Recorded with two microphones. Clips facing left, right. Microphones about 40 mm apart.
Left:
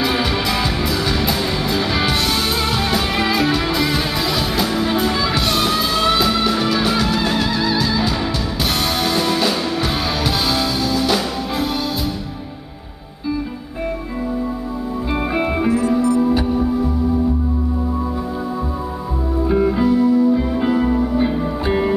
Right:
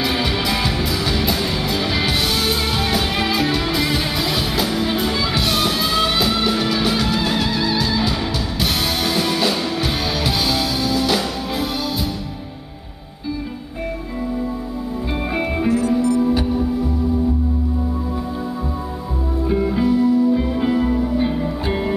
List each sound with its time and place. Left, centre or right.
0.0 s music: centre
16.0 s music: left
16.3 s music: centre
19.4 s music: centre